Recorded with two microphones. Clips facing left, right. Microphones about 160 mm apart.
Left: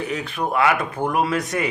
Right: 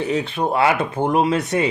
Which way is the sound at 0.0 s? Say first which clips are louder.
Right 4 dB; 30° right (ahead or behind).